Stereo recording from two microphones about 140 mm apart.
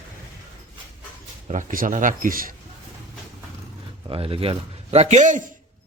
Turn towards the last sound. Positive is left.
turn(degrees=-60)  # may be behind; listen again after turning